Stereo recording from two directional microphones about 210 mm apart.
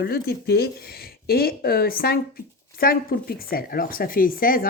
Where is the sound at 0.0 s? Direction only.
50° left (ahead or behind).